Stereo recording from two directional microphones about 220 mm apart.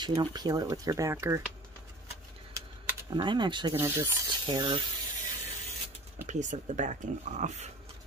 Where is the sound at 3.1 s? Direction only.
20° right (ahead or behind).